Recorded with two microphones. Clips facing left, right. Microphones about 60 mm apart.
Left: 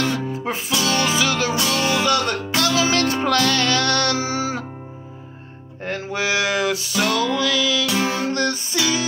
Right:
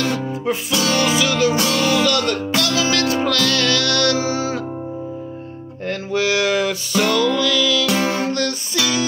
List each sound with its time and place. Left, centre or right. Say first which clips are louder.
0.0 s music: right 2 dB; left
5.9 s music: right 3 dB; centre
7.8 s music: right 2 dB; right
8.3 s music: even; left